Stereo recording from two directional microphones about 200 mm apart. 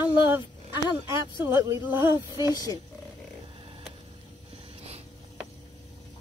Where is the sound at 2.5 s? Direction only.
20° left (ahead or behind).